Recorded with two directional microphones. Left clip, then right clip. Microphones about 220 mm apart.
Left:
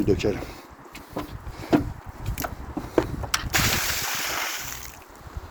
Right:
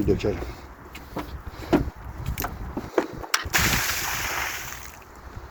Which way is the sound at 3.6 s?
35° left (ahead or behind).